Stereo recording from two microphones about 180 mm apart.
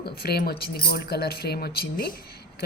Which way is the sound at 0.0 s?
60° left (ahead or behind).